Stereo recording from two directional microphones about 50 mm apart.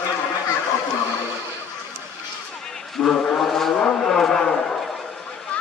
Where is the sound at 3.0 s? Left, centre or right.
Left.